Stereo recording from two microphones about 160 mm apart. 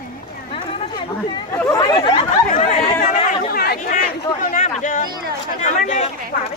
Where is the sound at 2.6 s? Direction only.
45° left (ahead or behind); by 4.0 s 70° left (ahead or behind).